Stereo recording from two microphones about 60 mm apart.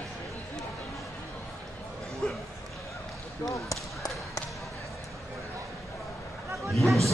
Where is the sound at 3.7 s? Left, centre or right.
Left.